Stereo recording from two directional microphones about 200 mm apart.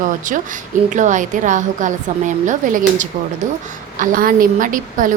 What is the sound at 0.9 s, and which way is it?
Speech, 40° right (ahead or behind).